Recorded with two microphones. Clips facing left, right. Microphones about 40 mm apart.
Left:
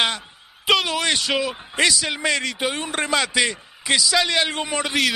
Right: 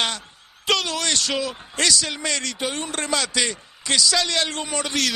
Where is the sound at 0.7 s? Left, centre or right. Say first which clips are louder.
Left 3 dB; centre.